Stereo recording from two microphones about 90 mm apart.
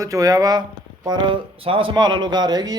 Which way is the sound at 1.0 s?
55° right (ahead or behind).